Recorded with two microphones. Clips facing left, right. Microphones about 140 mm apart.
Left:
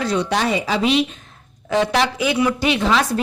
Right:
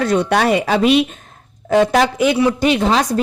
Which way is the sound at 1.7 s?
45° right (ahead or behind).